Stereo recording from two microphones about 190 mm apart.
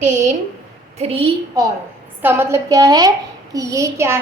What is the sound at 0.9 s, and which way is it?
Speech, 30° right (ahead or behind).